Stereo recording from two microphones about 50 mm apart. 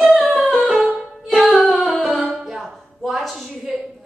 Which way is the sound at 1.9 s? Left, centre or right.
Centre.